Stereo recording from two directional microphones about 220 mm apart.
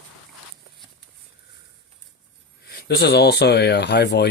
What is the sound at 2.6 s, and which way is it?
Speech, 45° left (ahead or behind).